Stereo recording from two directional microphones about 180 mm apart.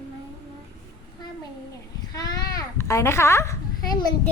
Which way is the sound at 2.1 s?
20° left (ahead or behind).